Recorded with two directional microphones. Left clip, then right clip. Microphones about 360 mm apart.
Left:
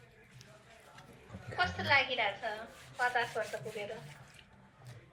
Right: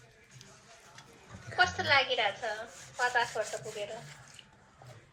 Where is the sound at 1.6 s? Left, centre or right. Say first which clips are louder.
Right 3 dB; right.